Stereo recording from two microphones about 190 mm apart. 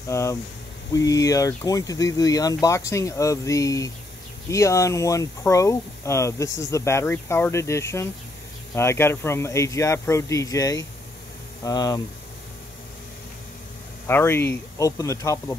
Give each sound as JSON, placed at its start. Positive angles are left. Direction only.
{"t": 0.1, "sound": "speech", "side_deg": 15}
{"t": 14.0, "sound": "speech", "side_deg": 10}